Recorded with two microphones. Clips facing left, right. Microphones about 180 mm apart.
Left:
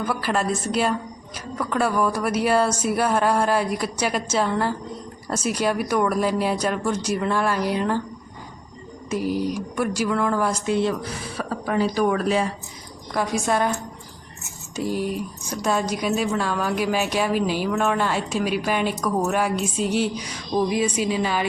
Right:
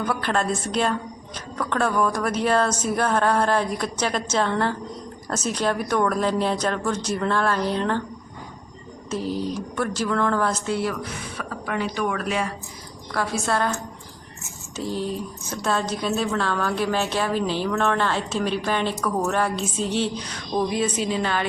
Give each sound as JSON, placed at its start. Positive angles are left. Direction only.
{"t": 0.0, "sound": "speech", "side_deg": 5}
{"t": 9.0, "sound": "speech", "side_deg": 10}
{"t": 11.3, "sound": "speech", "side_deg": 35}
{"t": 13.1, "sound": "speech", "side_deg": 15}
{"t": 14.8, "sound": "speech", "side_deg": 10}